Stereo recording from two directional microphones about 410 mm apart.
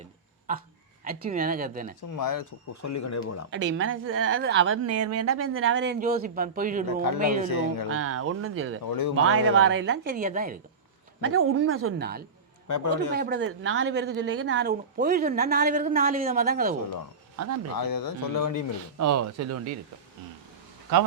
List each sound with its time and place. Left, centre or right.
1.0 s speech: right
2.1 s speech: left
3.5 s speech: right
7.5 s speech: left
7.9 s speech: right
8.9 s speech: left
9.1 s speech: right
11.3 s speech: right
12.6 s a man's voice: left
13.1 s speech: right
17.7 s speech: left
18.9 s speech: right